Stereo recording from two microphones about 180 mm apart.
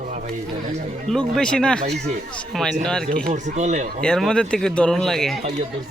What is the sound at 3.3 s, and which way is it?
Speech, 40° right (ahead or behind).